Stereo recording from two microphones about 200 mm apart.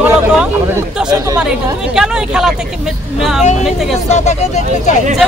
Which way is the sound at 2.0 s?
5° right (ahead or behind).